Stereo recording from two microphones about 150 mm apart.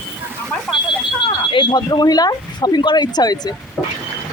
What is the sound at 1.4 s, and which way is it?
Speech, 30° left (ahead or behind).